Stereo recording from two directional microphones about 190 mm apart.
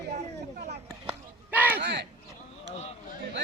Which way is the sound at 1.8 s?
60° right (ahead or behind).